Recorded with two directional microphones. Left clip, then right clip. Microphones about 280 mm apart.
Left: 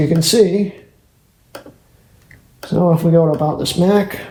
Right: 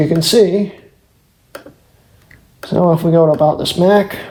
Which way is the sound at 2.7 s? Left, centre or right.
Right.